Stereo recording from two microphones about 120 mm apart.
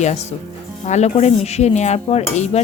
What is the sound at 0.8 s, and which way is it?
Dishes, 70° left (ahead or behind).